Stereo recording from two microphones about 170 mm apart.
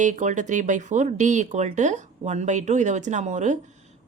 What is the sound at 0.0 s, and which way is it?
Speech, 45° right (ahead or behind).